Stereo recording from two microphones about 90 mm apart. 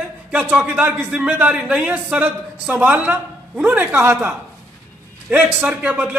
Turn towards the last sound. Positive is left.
turn(degrees=-15)  # may be behind; listen again after turning